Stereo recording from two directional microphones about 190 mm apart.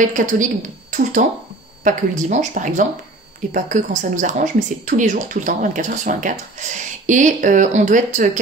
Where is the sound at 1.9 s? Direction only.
40° right (ahead or behind).